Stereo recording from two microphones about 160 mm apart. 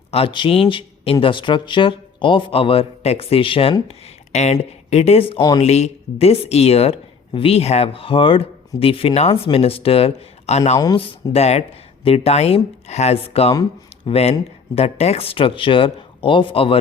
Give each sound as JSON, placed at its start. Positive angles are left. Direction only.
{"t": 0.1, "sound": "a man's voice", "side_deg": 35}
{"t": 5.4, "sound": "speech", "side_deg": 25}
{"t": 5.6, "sound": "a man's voice", "side_deg": 40}
{"t": 13.5, "sound": "a man's voice", "side_deg": 30}